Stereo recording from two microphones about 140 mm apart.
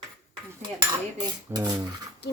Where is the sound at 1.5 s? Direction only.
15° right (ahead or behind).